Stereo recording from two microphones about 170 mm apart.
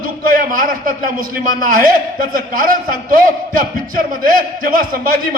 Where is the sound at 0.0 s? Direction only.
55° right (ahead or behind).